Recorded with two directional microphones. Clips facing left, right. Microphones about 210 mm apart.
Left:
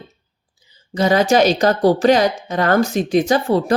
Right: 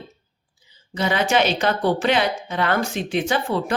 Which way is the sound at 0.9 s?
40° left (ahead or behind).